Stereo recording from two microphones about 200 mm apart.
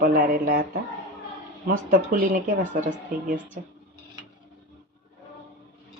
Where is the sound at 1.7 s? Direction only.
45° right (ahead or behind).